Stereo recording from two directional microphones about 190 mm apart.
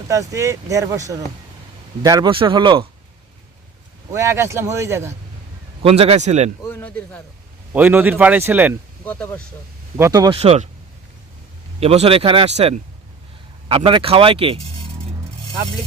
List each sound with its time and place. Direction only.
0.1 s speech: 15° right (ahead or behind)
4.1 s speech: 15° right (ahead or behind)
5.8 s a man's voice: 30° right (ahead or behind)
6.6 s speech: 10° left (ahead or behind)
7.7 s speech: 10° right (ahead or behind)
9.0 s speech: 10° left (ahead or behind)
10.0 s speech: 20° right (ahead or behind)
10.3 s a man's voice: 35° right (ahead or behind)
11.8 s a man's voice: 30° right (ahead or behind)